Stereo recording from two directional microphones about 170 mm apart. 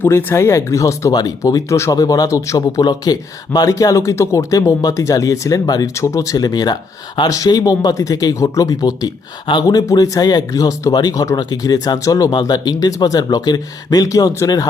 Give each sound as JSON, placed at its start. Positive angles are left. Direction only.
{"t": 0.0, "sound": "speech", "side_deg": 10}